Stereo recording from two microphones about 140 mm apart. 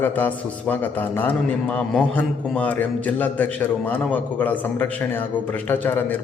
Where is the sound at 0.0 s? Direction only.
10° left (ahead or behind).